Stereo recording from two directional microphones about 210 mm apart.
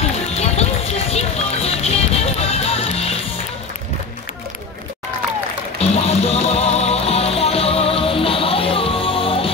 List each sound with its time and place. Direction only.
0.4 s music: 30° left (ahead or behind)
5.8 s music: 30° left (ahead or behind)